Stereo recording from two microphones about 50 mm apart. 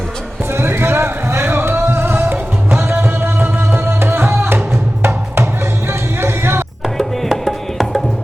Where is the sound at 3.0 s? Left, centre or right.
Right.